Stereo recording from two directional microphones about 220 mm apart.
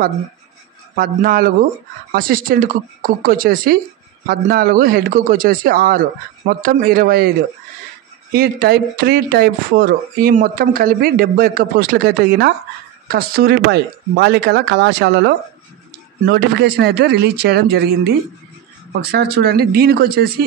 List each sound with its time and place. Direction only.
0.9 s a man's voice: 40° right (ahead or behind)